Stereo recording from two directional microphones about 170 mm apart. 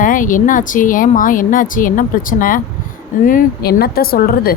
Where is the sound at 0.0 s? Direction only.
50° left (ahead or behind).